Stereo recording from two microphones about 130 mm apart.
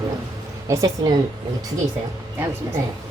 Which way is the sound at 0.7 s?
25° right (ahead or behind).